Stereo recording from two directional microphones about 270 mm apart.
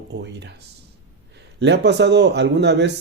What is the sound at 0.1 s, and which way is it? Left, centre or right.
Speech, right.